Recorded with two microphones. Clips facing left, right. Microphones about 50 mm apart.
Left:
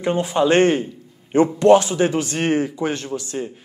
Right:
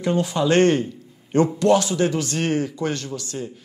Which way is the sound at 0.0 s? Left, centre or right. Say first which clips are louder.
Left 2 dB; left.